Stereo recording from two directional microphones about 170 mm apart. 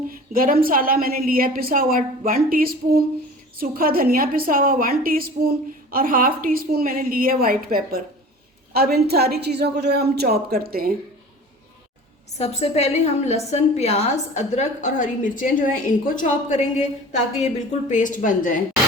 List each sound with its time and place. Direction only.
0.3 s a woman's voice: 55° right (ahead or behind)
12.4 s a woman's voice: 40° left (ahead or behind)